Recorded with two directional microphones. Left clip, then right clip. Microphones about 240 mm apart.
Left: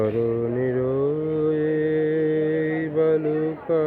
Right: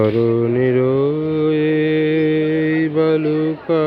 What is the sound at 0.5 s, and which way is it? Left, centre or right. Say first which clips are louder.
Mantra: right 7 dB; right.